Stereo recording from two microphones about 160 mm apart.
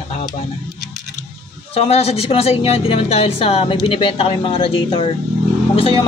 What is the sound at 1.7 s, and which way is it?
Speech, 40° left (ahead or behind).